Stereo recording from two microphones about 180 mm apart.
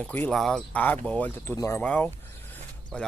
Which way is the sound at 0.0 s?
10° left (ahead or behind).